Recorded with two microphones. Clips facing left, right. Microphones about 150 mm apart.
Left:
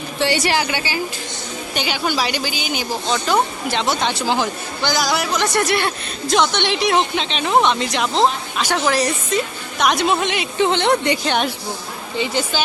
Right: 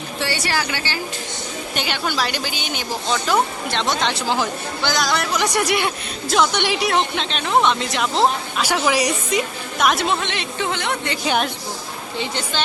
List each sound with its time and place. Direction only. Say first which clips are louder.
0.3 s a woman's voice: left 5 dB; 20° left (ahead or behind)
1.7 s a woman's voice: left 3 dB; centre (ahead or behind)
5.3 s a woman's voice: left 1 dB; 10° right (ahead or behind)
10.2 s a woman's voice: left 5 dB; 10° left (ahead or behind)
10.6 s speech: left 8 dB; 25° left (ahead or behind)
11.2 s a woman's voice: left 1 dB; 5° right (ahead or behind)